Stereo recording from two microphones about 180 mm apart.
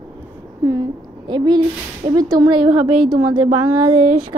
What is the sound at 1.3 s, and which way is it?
Speech, 25° right (ahead or behind).